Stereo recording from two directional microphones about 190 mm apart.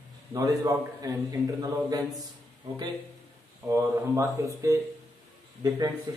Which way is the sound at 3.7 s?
15° right (ahead or behind).